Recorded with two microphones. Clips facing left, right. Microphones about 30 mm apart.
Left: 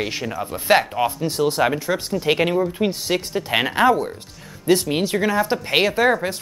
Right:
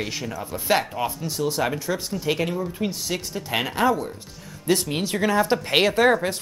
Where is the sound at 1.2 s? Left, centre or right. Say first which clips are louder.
Left 5 dB; left.